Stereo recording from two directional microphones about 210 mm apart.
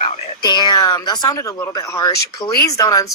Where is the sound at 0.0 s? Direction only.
20° left (ahead or behind).